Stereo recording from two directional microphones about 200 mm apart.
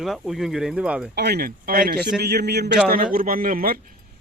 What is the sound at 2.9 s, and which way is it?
Speech, 45° right (ahead or behind).